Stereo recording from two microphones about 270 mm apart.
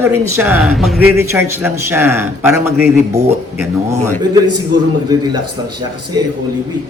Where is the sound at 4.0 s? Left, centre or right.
Right.